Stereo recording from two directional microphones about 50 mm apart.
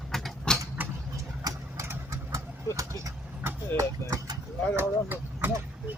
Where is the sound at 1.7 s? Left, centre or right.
Right.